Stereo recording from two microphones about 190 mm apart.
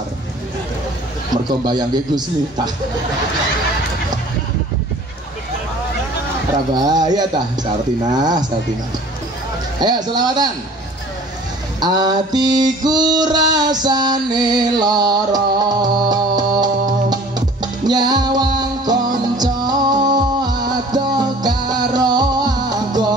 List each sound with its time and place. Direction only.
1.3 s music: 20° right (ahead or behind)
6.7 s music: 20° right (ahead or behind)
9.8 s music: 20° right (ahead or behind)
11.8 s music: 20° right (ahead or behind)